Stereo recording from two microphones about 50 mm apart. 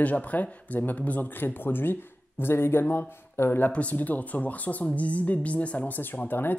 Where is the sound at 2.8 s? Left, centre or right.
Left.